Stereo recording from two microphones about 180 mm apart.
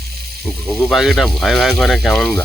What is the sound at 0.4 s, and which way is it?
Speech, centre (ahead or behind).